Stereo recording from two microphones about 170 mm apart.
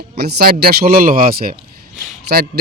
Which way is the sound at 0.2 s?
65° right (ahead or behind).